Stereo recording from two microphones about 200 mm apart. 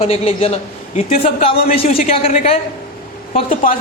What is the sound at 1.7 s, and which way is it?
A man's voice, 30° left (ahead or behind).